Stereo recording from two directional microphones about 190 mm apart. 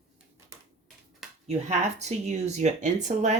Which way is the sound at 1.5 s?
35° right (ahead or behind).